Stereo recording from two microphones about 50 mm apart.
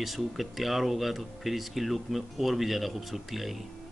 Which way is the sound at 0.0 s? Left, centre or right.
Centre.